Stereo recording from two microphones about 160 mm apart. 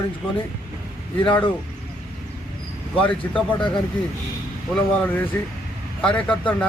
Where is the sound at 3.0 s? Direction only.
30° left (ahead or behind).